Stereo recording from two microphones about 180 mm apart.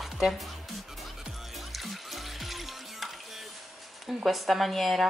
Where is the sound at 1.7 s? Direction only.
Centre (ahead or behind).